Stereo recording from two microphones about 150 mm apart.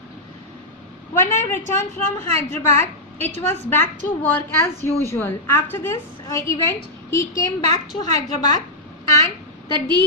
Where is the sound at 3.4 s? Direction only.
15° left (ahead or behind).